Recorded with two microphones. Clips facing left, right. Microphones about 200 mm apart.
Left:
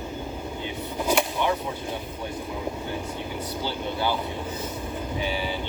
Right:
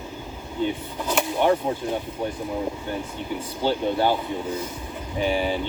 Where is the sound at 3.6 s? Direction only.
50° right (ahead or behind).